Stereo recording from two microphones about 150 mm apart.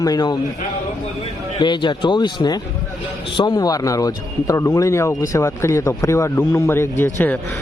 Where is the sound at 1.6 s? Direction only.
30° left (ahead or behind).